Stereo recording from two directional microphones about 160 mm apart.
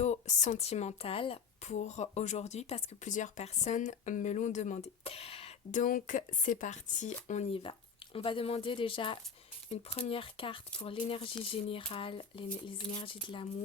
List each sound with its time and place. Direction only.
0.0 s a woman's voice: 45° left (ahead or behind)
5.8 s speech: 55° left (ahead or behind); by 13.5 s 30° left (ahead or behind)